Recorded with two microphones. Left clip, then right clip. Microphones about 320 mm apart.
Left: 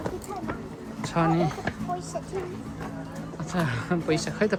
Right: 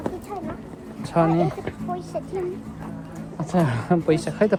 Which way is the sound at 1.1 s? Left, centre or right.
Centre.